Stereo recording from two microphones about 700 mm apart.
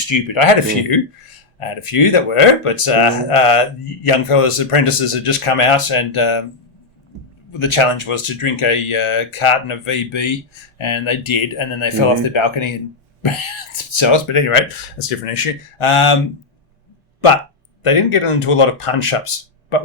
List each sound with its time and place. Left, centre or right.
0.0 s speech: left
7.6 s speech: left
13.9 s speech: left
17.8 s speech: left